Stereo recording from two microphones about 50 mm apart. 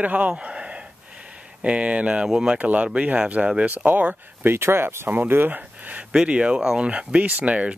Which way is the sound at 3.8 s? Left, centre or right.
Right.